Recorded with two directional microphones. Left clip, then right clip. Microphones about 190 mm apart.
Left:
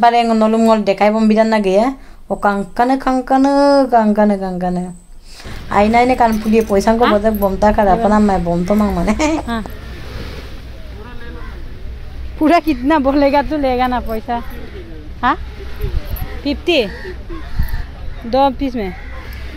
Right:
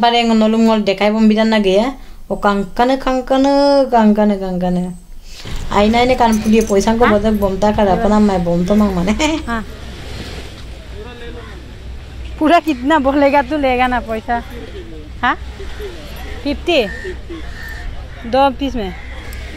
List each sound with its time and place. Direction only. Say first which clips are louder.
0.0 s speech: left 1 dB; 10° left (ahead or behind)
12.4 s speech: right 1 dB; 20° left (ahead or behind)
16.4 s speech: even; 20° left (ahead or behind)
18.3 s speech: right 1 dB; 20° left (ahead or behind)